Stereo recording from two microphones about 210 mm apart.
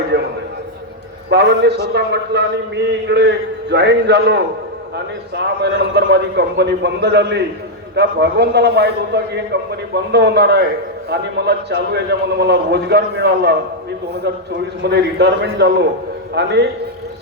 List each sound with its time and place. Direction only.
0.1 s a sound: 55° right (ahead or behind)
1.3 s a man's voice: 55° right (ahead or behind)
14.8 s a man's voice: 50° right (ahead or behind)